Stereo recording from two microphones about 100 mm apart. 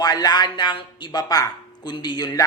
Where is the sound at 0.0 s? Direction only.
40° left (ahead or behind).